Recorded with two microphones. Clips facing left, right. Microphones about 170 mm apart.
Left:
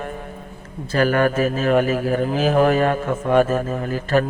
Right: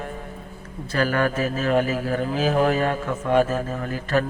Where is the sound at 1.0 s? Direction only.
50° left (ahead or behind).